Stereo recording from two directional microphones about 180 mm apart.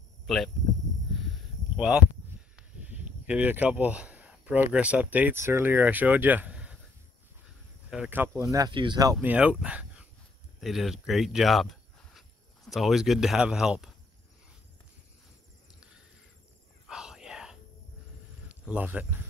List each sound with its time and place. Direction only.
0.3 s speech: centre (ahead or behind)
1.8 s speech: 5° right (ahead or behind)
7.9 s speech: 5° right (ahead or behind); by 9.1 s 25° right (ahead or behind)
9.1 s speech: 10° right (ahead or behind)
16.8 s a sound: centre (ahead or behind)
18.5 s speech: 10° right (ahead or behind)